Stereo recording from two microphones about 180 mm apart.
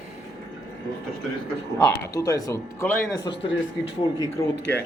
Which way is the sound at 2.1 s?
20° left (ahead or behind).